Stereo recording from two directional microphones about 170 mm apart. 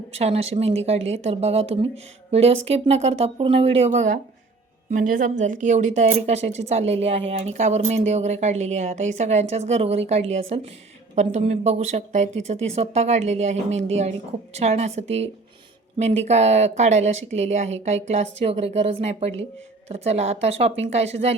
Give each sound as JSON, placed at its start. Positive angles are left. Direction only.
{"t": 0.2, "sound": "a woman's voice", "side_deg": -35}